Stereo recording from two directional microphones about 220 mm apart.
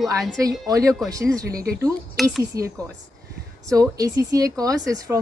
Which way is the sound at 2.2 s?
Centre (ahead or behind).